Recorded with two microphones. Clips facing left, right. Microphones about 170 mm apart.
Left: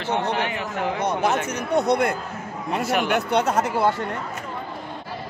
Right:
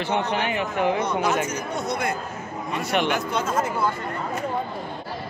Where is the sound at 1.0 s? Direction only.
60° left (ahead or behind).